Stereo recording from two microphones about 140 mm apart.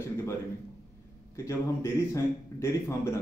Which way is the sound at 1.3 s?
20° left (ahead or behind).